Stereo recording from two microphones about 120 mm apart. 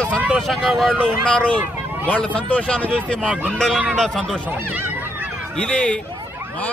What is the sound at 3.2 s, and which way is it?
Crowd, 10° right (ahead or behind).